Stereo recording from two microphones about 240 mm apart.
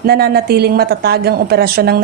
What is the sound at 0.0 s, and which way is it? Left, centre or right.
A woman's voice, right.